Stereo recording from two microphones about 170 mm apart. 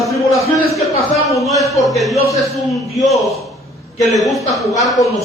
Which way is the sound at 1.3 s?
20° left (ahead or behind).